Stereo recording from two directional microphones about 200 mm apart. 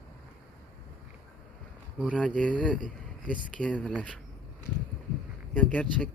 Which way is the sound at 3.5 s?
5° left (ahead or behind).